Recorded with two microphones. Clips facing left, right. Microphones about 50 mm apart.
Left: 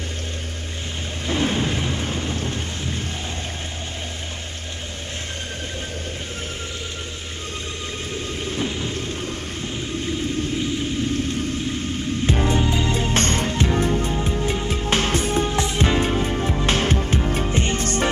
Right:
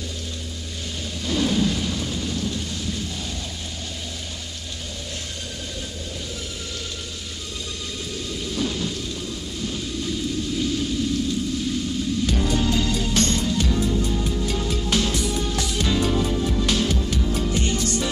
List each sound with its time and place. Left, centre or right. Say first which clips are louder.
1.2 s thunder: even; left
8.5 s thunder: right 1 dB; left
12.3 s music: left 5 dB; left